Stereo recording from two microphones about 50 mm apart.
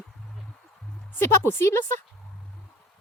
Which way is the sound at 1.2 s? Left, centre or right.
Left.